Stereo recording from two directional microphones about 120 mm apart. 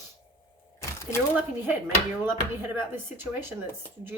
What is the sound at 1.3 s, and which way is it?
Speech, 15° right (ahead or behind).